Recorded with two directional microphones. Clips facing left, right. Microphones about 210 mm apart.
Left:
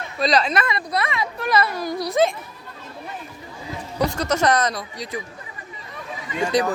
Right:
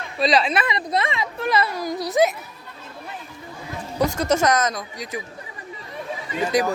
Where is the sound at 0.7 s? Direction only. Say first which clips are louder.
Right 1 dB; 20° right (ahead or behind).